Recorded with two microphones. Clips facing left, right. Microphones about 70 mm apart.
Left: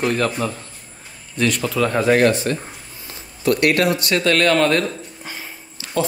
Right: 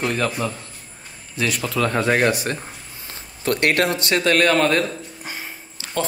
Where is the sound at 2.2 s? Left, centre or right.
Centre.